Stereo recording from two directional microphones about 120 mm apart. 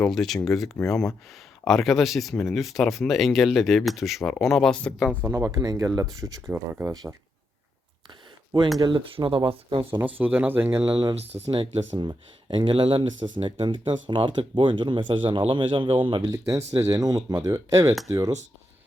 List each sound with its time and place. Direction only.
0.0 s speech: centre (ahead or behind)
5.2 s speech: 25° right (ahead or behind)
6.5 s speech: 15° right (ahead or behind)
8.8 s speech: 40° right (ahead or behind)
10.0 s speech: 15° right (ahead or behind)
11.1 s speech: 60° right (ahead or behind)
16.3 s speech: 25° right (ahead or behind)